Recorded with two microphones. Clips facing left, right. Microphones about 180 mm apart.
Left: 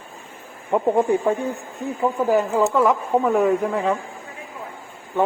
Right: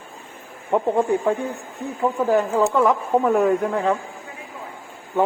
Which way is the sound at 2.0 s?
Centre (ahead or behind).